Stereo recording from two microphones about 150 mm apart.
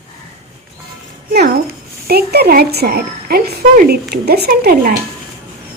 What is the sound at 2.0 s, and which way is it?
A woman's voice, 90° right.